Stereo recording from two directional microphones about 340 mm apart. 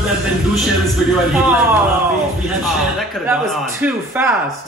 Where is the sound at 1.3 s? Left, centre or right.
Centre.